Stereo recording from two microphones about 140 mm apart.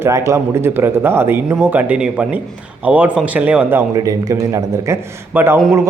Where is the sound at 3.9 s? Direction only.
25° right (ahead or behind).